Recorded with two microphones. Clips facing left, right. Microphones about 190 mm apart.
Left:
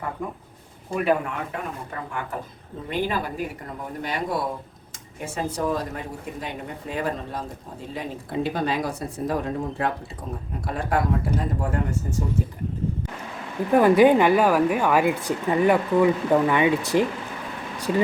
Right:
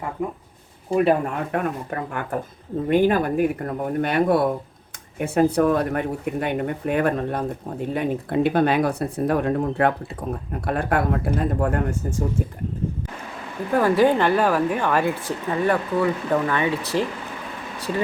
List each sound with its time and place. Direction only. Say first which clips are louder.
0.9 s speech: right 4 dB; 30° right (ahead or behind)
1.5 s speech: right 7 dB; 55° right (ahead or behind)
13.7 s a woman's voice: left 2 dB; 15° left (ahead or behind)